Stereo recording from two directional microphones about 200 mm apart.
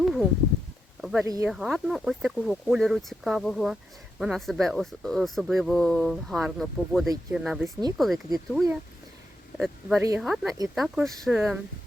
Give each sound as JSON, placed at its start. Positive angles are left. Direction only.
{"t": 0.0, "sound": "a sound", "side_deg": 0}
{"t": 1.2, "sound": "speech", "side_deg": -15}
{"t": 1.5, "sound": "speech", "side_deg": 0}